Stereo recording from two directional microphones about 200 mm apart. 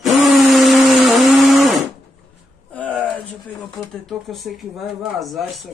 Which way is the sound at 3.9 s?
Centre (ahead or behind).